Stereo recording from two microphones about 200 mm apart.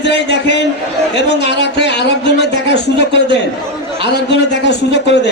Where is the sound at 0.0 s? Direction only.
60° left (ahead or behind).